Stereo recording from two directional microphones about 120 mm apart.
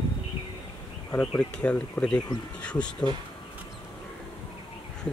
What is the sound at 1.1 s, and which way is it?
Speech, 10° left (ahead or behind).